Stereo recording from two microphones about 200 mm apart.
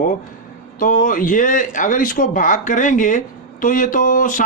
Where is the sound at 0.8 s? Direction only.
40° left (ahead or behind).